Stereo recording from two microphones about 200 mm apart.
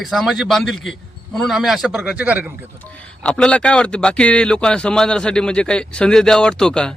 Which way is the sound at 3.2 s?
5° left (ahead or behind).